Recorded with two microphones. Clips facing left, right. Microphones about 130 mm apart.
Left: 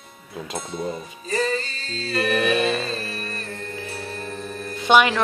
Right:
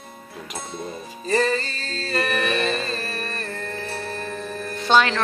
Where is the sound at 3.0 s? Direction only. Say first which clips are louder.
Right 2 dB; 50° right (ahead or behind).